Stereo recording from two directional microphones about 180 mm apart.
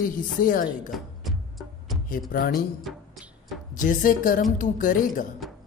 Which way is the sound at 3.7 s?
50° left (ahead or behind).